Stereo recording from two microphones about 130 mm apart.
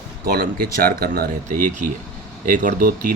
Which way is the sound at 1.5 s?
85° right.